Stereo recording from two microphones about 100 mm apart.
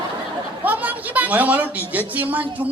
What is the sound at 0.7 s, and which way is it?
A woman's voice, 15° right (ahead or behind).